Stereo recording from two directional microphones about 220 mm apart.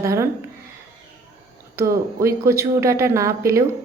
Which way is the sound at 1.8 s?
10° right (ahead or behind).